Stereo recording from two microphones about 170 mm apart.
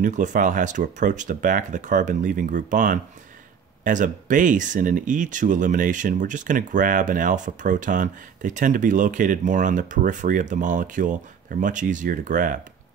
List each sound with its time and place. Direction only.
0.0 s speech: 45° right (ahead or behind)